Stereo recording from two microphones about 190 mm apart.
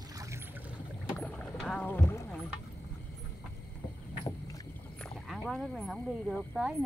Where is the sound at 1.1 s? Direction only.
10° left (ahead or behind).